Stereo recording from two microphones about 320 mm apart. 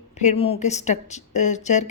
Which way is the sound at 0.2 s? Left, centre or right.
Centre.